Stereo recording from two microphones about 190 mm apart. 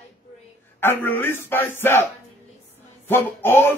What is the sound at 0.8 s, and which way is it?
Speech, 10° left (ahead or behind).